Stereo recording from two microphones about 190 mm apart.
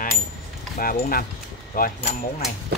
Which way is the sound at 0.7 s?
50° left (ahead or behind).